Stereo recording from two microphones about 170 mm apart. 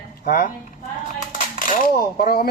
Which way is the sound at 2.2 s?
60° left (ahead or behind).